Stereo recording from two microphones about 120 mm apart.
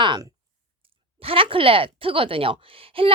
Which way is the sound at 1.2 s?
50° right (ahead or behind).